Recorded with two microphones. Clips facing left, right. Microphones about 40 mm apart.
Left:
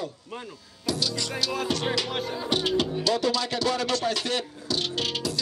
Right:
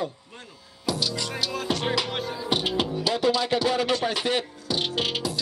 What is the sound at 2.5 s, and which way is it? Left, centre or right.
Music, centre.